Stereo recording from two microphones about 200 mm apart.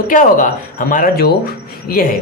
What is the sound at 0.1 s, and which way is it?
Speech, 40° left (ahead or behind).